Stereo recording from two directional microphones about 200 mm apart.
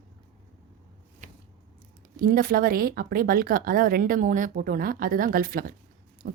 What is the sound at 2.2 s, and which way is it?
Speech, 45° right (ahead or behind).